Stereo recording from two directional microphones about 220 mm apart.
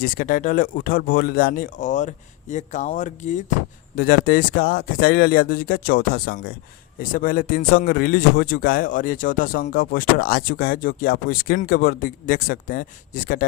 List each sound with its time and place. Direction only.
0.0 s speech: 40° left (ahead or behind)